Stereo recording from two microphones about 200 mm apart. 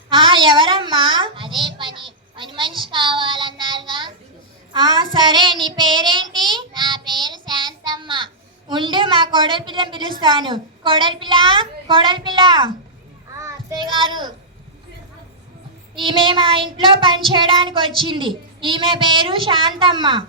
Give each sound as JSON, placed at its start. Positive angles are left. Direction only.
{"t": 0.1, "sound": "a sound", "side_deg": -25}
{"t": 2.9, "sound": "child singing", "side_deg": -25}
{"t": 4.7, "sound": "a child's voice", "side_deg": -25}
{"t": 5.1, "sound": "child singing", "side_deg": -25}
{"t": 16.0, "sound": "child singing", "side_deg": -25}